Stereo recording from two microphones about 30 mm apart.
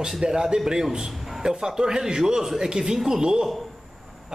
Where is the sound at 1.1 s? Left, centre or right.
Centre.